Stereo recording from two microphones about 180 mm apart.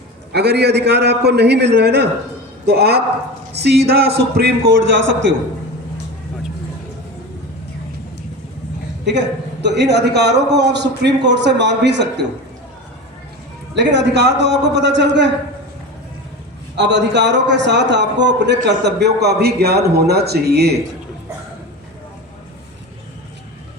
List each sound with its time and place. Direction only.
0.3 s a man's voice: 65° right (ahead or behind)
9.0 s a man's voice: 75° right (ahead or behind)
13.7 s a man's voice: 75° right (ahead or behind)
16.7 s a man's voice: 75° right (ahead or behind)